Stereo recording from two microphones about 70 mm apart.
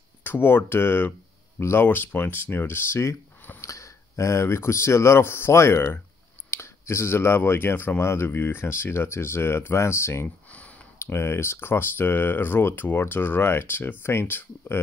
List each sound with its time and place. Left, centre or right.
0.2 s speech: left